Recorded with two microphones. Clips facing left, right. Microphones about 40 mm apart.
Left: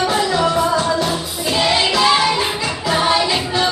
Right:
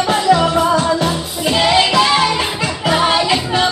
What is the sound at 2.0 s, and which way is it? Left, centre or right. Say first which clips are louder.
Music: right 1 dB; centre.